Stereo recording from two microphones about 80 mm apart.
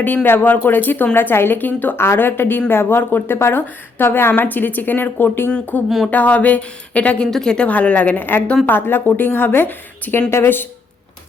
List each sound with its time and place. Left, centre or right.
0.0 s a woman's voice: left